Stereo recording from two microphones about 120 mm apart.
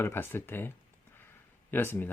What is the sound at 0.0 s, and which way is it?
Speech, 20° left (ahead or behind).